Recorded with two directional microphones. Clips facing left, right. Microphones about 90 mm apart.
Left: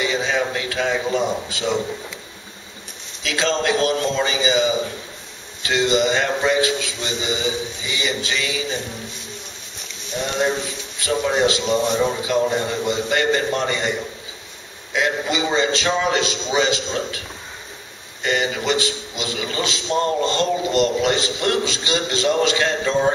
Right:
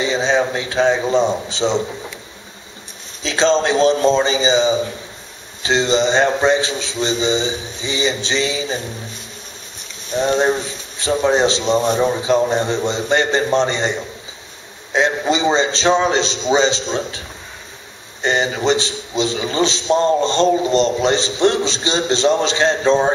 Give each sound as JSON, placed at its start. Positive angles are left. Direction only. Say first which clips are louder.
{"t": 0.0, "sound": "a man's voice", "louder": "right 4 dB", "side_deg": -30}
{"t": 3.2, "sound": "a man's voice", "louder": "right 6 dB", "side_deg": -25}
{"t": 10.2, "sound": "a man's voice", "louder": "right 5 dB", "side_deg": -35}
{"t": 18.2, "sound": "a man's voice", "louder": "right 4 dB", "side_deg": -30}